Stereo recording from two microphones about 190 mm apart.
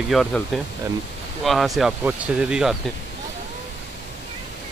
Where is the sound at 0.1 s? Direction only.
Centre (ahead or behind).